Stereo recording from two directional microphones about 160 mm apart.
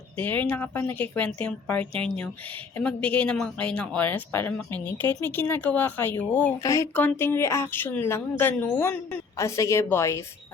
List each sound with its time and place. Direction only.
0.2 s speech: 10° left (ahead or behind)
6.6 s speech: 20° left (ahead or behind)